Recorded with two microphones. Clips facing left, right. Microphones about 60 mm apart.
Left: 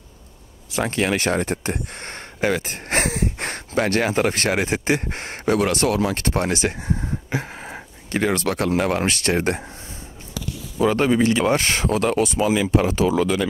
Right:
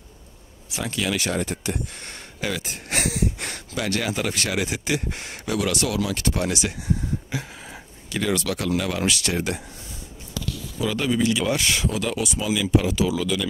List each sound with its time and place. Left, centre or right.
0.7 s speech: left
10.8 s speech: left